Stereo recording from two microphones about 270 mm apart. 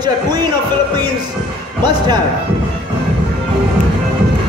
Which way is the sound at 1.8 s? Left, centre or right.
Centre.